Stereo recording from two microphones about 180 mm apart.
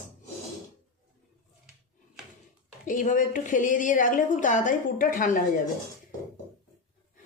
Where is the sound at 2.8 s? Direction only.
45° left (ahead or behind).